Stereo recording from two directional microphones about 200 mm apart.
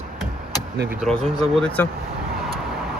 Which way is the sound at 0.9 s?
Centre (ahead or behind).